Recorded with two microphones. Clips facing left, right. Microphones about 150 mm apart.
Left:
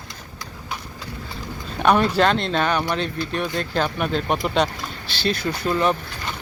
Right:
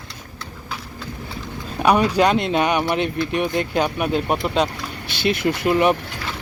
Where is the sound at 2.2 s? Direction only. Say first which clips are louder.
Right 2 dB; 10° right (ahead or behind).